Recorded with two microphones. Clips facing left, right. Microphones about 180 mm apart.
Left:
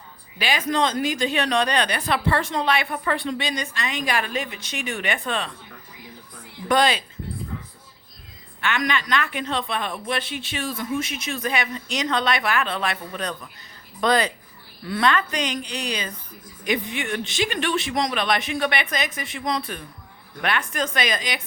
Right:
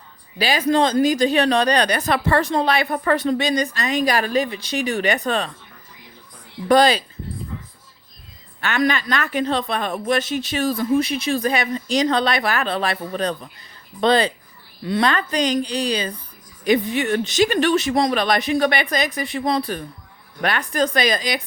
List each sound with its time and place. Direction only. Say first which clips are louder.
0.3 s a woman's voice: right 5 dB; 35° right (ahead or behind)
6.7 s a woman's voice: right 5 dB; 35° right (ahead or behind)
8.6 s a woman's voice: right 4 dB; 40° right (ahead or behind)